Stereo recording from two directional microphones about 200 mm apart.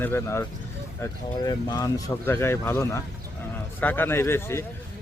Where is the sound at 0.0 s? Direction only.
10° left (ahead or behind).